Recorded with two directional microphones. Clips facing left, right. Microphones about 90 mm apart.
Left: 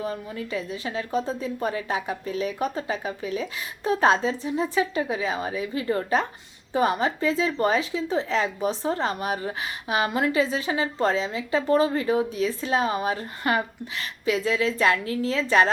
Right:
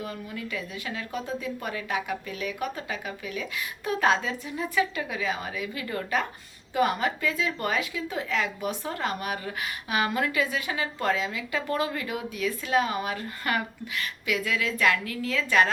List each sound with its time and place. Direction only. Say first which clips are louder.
0.0 s speech: left 4 dB; 30° left (ahead or behind)